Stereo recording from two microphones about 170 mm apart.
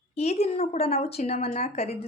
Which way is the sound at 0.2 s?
35° left (ahead or behind).